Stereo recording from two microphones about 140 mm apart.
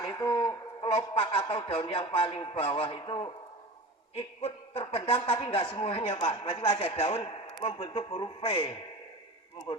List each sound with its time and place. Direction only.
0.0 s speech: 30° left (ahead or behind)
4.1 s speech: 45° left (ahead or behind)